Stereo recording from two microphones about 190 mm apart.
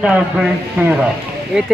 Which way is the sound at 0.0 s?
5° right (ahead or behind).